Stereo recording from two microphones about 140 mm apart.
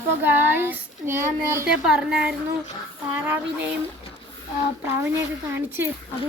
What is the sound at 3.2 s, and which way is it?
Speech, 15° right (ahead or behind).